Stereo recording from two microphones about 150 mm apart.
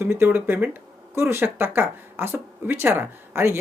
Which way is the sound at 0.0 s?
15° right (ahead or behind).